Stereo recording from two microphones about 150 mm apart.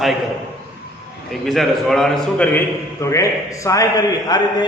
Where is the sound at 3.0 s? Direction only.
20° left (ahead or behind).